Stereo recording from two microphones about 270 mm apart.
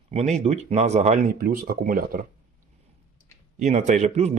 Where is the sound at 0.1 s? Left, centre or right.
Right.